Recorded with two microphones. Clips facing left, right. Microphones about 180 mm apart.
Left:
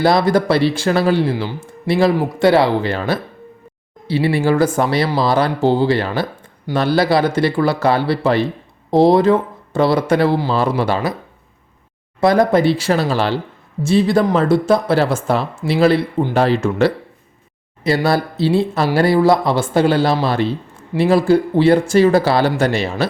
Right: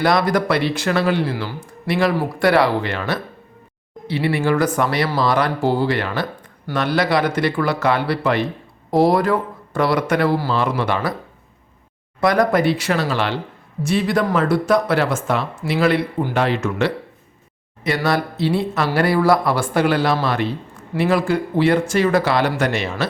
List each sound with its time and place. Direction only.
0.0 s speech: 30° left (ahead or behind)
10.5 s speech: 35° left (ahead or behind)
12.2 s speech: 25° left (ahead or behind)